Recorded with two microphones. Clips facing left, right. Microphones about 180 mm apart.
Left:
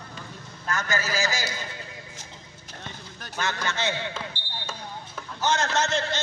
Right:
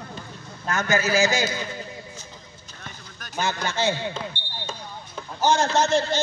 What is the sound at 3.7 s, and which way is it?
Speech, 30° right (ahead or behind).